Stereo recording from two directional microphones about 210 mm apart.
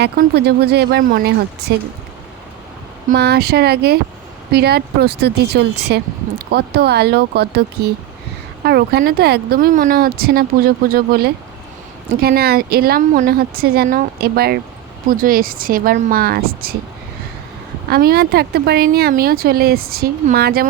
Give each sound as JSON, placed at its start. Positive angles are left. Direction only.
{"t": 0.0, "sound": "speech", "side_deg": -50}
{"t": 3.1, "sound": "speech", "side_deg": -50}
{"t": 17.8, "sound": "speech", "side_deg": -45}